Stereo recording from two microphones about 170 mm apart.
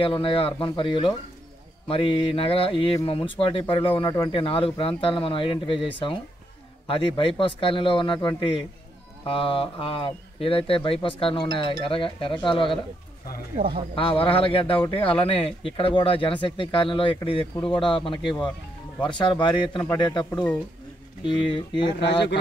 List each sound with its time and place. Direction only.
0.0 s speech: 30° left (ahead or behind)
13.9 s speech: 30° left (ahead or behind)